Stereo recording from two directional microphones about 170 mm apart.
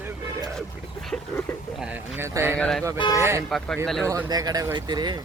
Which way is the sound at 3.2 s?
15° right (ahead or behind).